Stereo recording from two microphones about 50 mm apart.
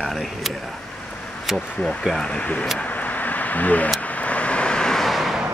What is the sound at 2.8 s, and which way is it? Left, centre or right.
Vehicle, left.